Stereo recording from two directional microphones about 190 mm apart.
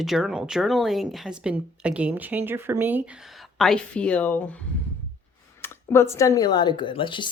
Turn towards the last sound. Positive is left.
turn(degrees=25)  # may be behind; listen again after turning